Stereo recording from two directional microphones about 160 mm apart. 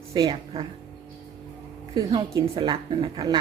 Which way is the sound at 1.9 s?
30° right (ahead or behind).